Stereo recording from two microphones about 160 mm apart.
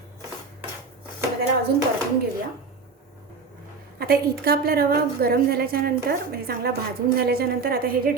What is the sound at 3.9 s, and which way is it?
A woman's voice, 75° right (ahead or behind).